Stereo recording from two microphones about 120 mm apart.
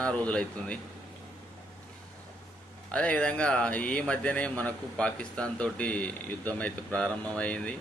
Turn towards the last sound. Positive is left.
turn(degrees=10)  # may be behind; listen again after turning